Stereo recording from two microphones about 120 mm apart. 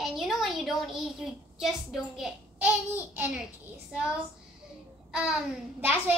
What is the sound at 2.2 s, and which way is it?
A child's voice, 10° right (ahead or behind).